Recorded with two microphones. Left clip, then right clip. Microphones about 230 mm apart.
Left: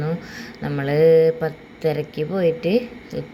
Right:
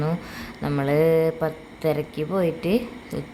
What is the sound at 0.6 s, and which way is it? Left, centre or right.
A woman's voice, centre.